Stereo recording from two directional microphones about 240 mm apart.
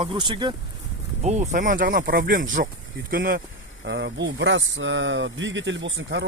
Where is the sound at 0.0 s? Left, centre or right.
Centre.